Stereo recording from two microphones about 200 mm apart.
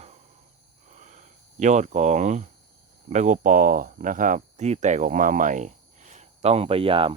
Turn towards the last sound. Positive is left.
turn(degrees=-25)  # may be behind; listen again after turning